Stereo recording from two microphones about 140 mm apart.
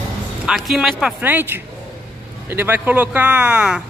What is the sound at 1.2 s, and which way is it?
A man's voice, 15° right (ahead or behind).